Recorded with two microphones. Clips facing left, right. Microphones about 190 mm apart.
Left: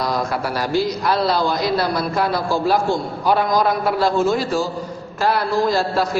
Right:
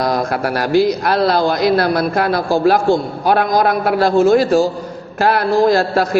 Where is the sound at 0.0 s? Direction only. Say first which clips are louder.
Right 4 dB; 50° right (ahead or behind); by 4.4 s 70° right (ahead or behind).